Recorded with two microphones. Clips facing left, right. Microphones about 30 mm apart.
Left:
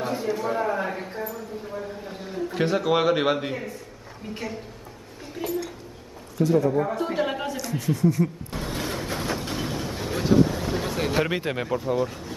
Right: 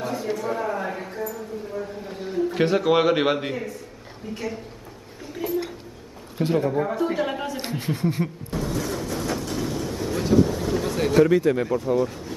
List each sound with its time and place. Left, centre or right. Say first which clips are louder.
0.0 s a sound: left 1 dB; centre
0.3 s speech: left 1 dB; centre
1.1 s speech: right 2 dB; left
1.7 s a sound: right 2 dB; centre
2.2 s a man's voice: right 4 dB; centre
5.4 s a sound: right 2 dB; centre
6.3 s a man's voice: left 2 dB; right
6.7 s speech: even; centre
7.2 s speech: even; centre
7.7 s speech: left 4 dB; right
8.5 s train: right 3 dB; left
9.4 s vehicle: right 2 dB; left
11.1 s speech: right 11 dB; left
11.6 s speech: right 3 dB; centre